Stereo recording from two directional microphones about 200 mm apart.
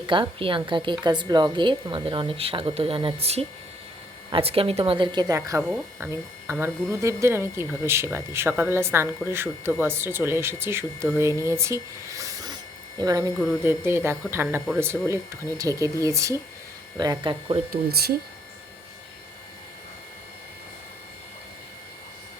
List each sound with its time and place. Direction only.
0.1 s speech: 25° right (ahead or behind)
17.7 s speech: 50° right (ahead or behind)